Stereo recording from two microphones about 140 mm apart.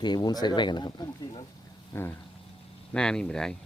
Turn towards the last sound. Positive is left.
turn(degrees=5)  # may be behind; listen again after turning